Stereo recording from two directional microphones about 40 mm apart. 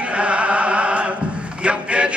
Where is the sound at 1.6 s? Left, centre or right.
Right.